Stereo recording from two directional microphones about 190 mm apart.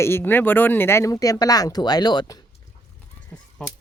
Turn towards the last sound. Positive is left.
turn(degrees=10)  # may be behind; listen again after turning